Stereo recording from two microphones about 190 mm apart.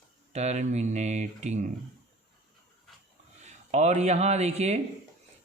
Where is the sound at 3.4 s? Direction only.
35° right (ahead or behind).